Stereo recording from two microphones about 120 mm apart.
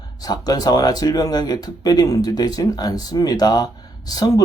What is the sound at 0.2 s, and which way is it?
Speech, 30° left (ahead or behind).